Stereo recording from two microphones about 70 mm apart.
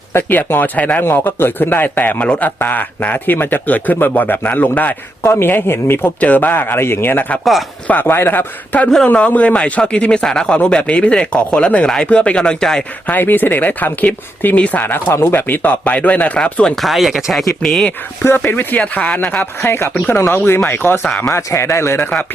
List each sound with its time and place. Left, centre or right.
0.1 s a man's voice: left
5.2 s speech: left
6.1 s a man's voice: left
13.1 s a man's voice: left
16.8 s speech: centre
17.6 s speech: centre
18.2 s a man's voice: left
19.6 s a man's voice: left
21.1 s speech: centre
21.3 s speech: left